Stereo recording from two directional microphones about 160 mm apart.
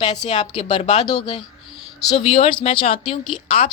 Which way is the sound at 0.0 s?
25° left (ahead or behind).